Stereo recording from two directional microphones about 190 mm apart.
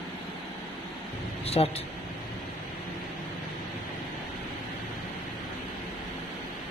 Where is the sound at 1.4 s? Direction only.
30° left (ahead or behind).